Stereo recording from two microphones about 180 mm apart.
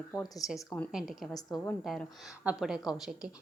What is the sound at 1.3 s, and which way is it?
Speech, 15° left (ahead or behind).